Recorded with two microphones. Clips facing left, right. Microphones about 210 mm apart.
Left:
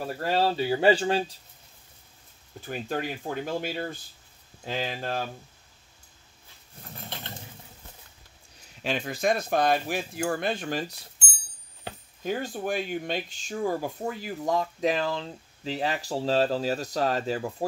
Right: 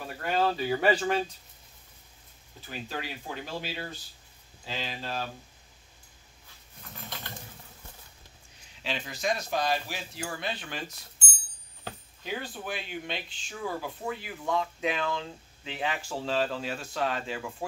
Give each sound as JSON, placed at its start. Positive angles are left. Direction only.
{"t": 0.0, "sound": "speech", "side_deg": 35}
{"t": 2.6, "sound": "speech", "side_deg": 50}
{"t": 6.8, "sound": "a sound", "side_deg": 30}
{"t": 8.8, "sound": "speech", "side_deg": 50}
{"t": 12.2, "sound": "speech", "side_deg": 45}